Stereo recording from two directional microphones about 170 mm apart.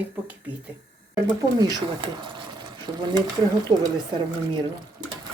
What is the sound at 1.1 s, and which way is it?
Speech, 20° right (ahead or behind).